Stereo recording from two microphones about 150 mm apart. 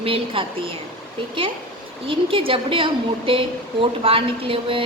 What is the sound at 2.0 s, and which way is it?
Speech, 35° right (ahead or behind).